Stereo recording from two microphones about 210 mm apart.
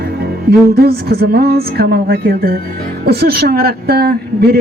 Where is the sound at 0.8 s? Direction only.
50° right (ahead or behind).